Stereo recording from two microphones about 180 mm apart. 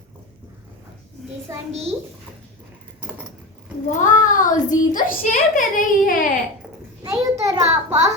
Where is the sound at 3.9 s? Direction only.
45° left (ahead or behind).